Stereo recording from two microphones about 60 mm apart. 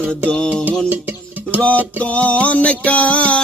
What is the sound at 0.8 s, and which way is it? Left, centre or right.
Music, right.